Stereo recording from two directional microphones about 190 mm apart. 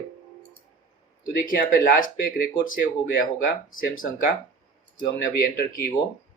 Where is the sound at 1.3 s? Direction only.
50° left (ahead or behind).